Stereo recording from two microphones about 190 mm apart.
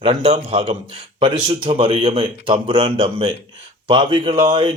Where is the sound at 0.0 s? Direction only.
30° right (ahead or behind).